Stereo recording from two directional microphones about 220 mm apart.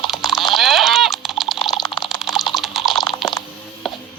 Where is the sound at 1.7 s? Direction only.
20° left (ahead or behind).